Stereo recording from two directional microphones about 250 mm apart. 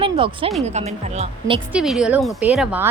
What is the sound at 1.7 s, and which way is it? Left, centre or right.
A woman's voice, centre.